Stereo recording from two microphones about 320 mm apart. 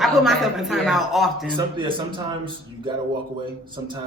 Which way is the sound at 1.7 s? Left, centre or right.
Centre.